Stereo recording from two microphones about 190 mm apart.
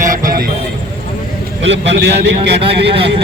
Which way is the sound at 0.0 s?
45° right (ahead or behind).